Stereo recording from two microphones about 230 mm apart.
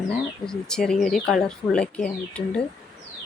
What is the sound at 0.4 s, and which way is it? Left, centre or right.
Speech, centre.